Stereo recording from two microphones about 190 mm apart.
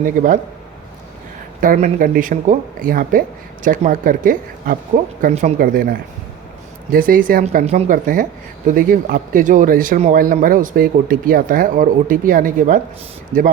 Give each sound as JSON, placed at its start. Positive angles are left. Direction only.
{"t": 0.0, "sound": "speech", "side_deg": -45}
{"t": 1.6, "sound": "speech", "side_deg": -45}
{"t": 5.5, "sound": "speech", "side_deg": -50}
{"t": 7.4, "sound": "speech", "side_deg": -35}